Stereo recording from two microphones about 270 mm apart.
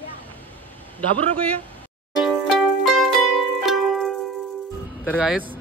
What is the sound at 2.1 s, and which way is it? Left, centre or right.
Music, centre.